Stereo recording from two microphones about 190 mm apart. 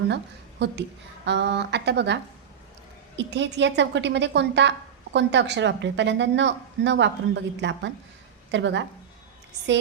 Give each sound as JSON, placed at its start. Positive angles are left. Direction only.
{"t": 0.6, "sound": "a woman's voice", "side_deg": -65}
{"t": 3.2, "sound": "a woman's voice", "side_deg": -65}